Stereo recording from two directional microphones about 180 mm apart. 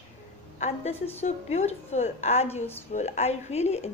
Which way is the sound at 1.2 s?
35° left (ahead or behind).